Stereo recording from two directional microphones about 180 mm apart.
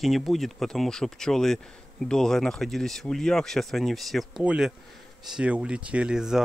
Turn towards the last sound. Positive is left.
turn(degrees=-5)  # may be behind; listen again after turning